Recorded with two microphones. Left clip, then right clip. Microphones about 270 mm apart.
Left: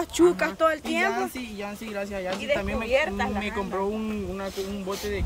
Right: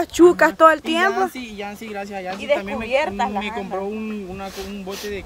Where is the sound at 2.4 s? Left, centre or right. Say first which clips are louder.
Right 7 dB; centre.